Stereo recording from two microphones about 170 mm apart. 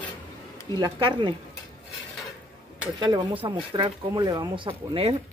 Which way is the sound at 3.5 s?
25° right (ahead or behind).